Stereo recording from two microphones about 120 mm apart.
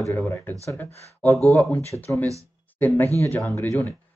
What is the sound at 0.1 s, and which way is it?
Speech, 20° left (ahead or behind).